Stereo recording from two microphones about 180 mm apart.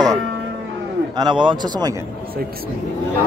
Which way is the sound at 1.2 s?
25° right (ahead or behind).